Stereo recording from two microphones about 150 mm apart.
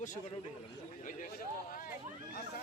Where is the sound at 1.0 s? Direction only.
60° left (ahead or behind).